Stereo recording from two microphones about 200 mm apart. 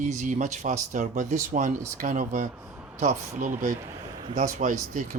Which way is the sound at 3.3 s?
40° right (ahead or behind).